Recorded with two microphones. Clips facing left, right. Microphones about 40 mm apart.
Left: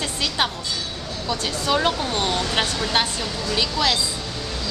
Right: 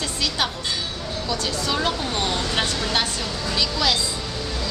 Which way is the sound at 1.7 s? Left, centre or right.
Centre.